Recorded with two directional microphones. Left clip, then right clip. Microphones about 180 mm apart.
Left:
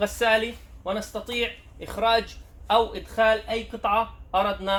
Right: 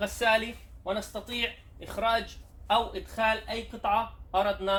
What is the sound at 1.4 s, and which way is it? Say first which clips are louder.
A man's voice: left 4 dB; 45° left (ahead or behind).